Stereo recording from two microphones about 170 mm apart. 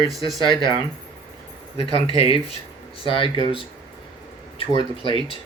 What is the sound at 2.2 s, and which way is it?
Speech, 35° left (ahead or behind).